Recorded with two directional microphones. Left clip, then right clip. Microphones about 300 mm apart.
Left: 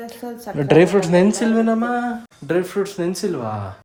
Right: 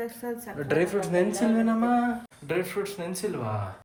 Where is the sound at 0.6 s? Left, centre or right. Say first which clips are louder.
Left 12 dB; left.